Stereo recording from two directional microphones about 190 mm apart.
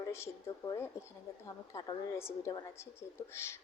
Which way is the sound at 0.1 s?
15° left (ahead or behind).